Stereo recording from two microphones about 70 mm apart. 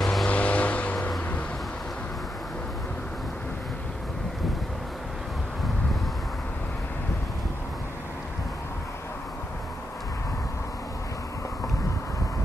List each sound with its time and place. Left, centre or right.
0.0 s vehicle: centre
0.3 s vehicle: centre